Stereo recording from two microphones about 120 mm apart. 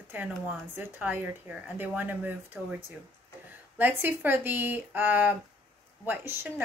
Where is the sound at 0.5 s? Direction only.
15° right (ahead or behind).